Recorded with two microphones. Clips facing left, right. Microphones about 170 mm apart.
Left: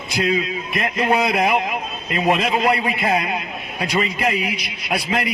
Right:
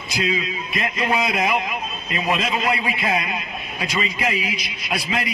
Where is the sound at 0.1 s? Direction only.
60° left (ahead or behind).